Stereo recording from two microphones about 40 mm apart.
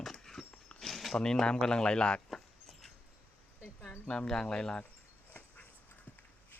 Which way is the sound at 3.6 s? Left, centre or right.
Left.